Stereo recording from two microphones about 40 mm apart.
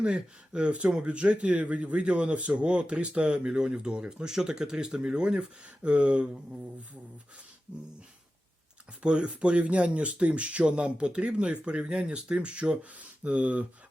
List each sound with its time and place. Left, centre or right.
0.0 s a man's voice: right
9.0 s a man's voice: right